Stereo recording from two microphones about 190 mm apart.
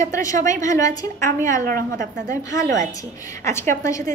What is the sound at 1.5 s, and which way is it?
A woman's voice, 45° right (ahead or behind).